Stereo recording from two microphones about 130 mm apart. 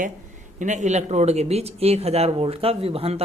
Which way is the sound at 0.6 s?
65° right (ahead or behind).